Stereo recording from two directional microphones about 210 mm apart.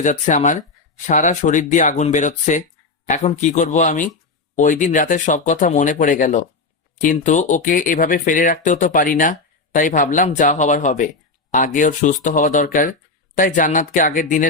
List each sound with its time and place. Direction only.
0.0 s speech: 35° left (ahead or behind)